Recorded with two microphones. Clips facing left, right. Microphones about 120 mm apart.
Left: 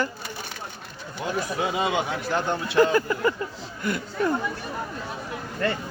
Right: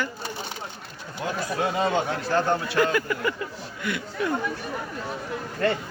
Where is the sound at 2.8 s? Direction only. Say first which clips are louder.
Left 7 dB; 35° left (ahead or behind).